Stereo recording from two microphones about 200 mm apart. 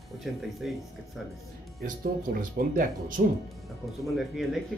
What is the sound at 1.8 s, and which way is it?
Speech, 45° right (ahead or behind).